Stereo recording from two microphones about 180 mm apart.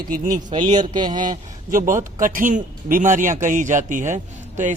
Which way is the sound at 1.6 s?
50° right (ahead or behind).